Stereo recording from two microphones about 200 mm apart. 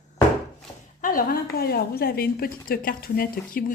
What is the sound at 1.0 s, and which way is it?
A woman's voice, 45° left (ahead or behind).